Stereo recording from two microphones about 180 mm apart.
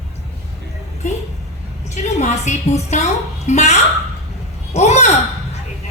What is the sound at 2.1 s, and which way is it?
A woman's voice, 40° left (ahead or behind).